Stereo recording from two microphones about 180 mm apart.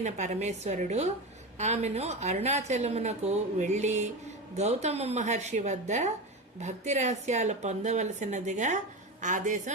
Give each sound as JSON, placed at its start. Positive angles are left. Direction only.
{"t": 0.0, "sound": "a woman's voice", "side_deg": -40}